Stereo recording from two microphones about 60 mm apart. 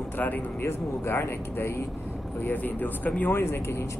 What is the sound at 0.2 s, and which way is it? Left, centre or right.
Speech, left.